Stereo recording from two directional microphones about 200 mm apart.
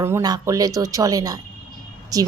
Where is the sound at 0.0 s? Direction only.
15° right (ahead or behind).